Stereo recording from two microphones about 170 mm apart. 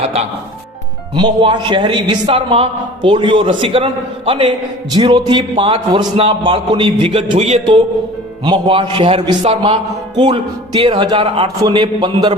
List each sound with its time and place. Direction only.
1.1 s a man's voice: 25° right (ahead or behind)